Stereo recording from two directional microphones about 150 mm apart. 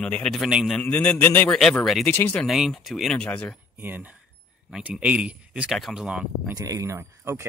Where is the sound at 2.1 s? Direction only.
10° left (ahead or behind).